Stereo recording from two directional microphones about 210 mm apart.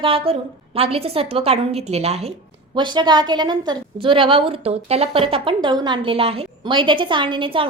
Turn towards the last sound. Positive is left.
turn(degrees=-25)  # may be behind; listen again after turning